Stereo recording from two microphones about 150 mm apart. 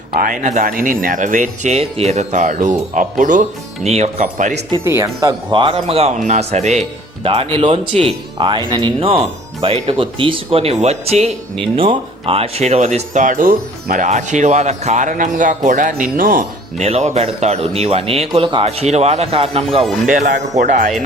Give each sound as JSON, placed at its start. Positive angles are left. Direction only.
{"t": 0.2, "sound": "speech", "side_deg": -55}
{"t": 3.8, "sound": "speech", "side_deg": -45}
{"t": 4.8, "sound": "speech", "side_deg": -20}
{"t": 5.5, "sound": "speech", "side_deg": -35}
{"t": 16.7, "sound": "speech", "side_deg": -45}
{"t": 20.1, "sound": "speech", "side_deg": -60}